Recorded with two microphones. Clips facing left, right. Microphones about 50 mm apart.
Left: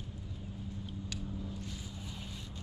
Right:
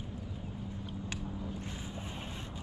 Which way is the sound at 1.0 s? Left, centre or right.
Right.